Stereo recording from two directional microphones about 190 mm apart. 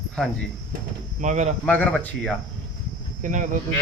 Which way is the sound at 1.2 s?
40° right (ahead or behind).